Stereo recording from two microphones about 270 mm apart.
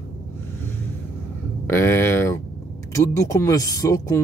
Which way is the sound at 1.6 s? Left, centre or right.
Centre.